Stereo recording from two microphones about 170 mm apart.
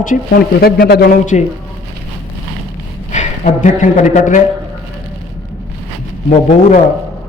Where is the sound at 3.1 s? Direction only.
45° left (ahead or behind).